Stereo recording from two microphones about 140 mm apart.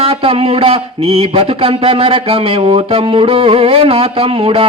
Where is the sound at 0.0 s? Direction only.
45° right (ahead or behind).